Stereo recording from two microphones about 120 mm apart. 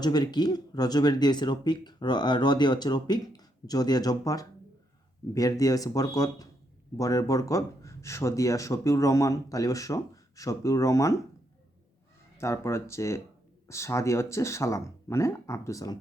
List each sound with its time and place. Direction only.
0.0 s speech: 35° left (ahead or behind)
12.4 s speech: 25° left (ahead or behind)